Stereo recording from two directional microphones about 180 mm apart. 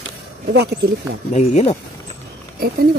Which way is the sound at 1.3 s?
40° left (ahead or behind).